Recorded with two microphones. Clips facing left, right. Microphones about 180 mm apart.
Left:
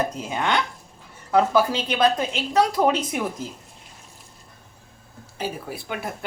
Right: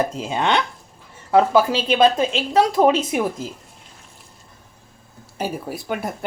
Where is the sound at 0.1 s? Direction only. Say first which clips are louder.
Right 4 dB; 25° right (ahead or behind).